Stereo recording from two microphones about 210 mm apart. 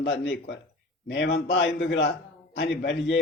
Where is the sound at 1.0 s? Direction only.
55° left (ahead or behind).